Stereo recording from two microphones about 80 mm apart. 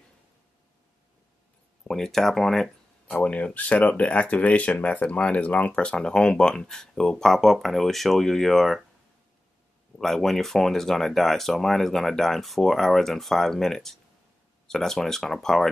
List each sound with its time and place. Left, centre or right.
1.9 s speech: centre
3.2 s speech: centre
9.9 s speech: centre